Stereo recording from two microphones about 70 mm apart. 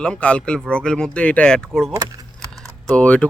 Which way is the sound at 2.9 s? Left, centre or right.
Centre.